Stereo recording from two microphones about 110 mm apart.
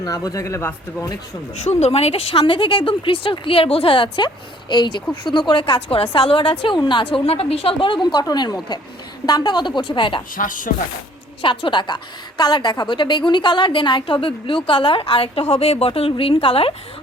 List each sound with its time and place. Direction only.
0.0 s speech: 35° left (ahead or behind)
1.8 s a woman's voice: 65° left (ahead or behind)
8.1 s a woman's voice: 40° left (ahead or behind)
11.4 s a woman's voice: 45° left (ahead or behind)